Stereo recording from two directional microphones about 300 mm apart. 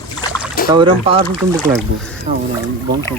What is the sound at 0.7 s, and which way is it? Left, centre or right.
Speech, centre.